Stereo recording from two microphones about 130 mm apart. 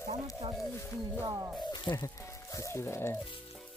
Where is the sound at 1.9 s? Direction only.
40° left (ahead or behind).